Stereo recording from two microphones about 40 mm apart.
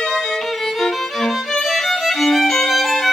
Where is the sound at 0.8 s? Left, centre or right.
Centre.